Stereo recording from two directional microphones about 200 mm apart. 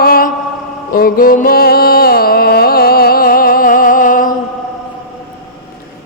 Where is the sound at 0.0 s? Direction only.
50° left (ahead or behind).